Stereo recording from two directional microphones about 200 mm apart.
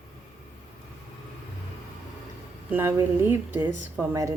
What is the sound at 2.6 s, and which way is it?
Speech, 10° right (ahead or behind).